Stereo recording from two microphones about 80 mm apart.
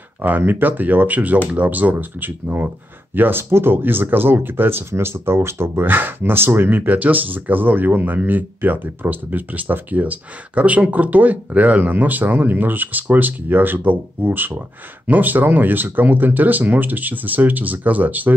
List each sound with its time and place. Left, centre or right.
0.2 s speech: right